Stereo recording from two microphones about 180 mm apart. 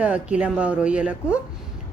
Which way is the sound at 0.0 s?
5° right (ahead or behind).